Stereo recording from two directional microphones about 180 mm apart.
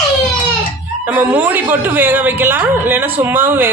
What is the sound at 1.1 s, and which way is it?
Speech, 10° right (ahead or behind).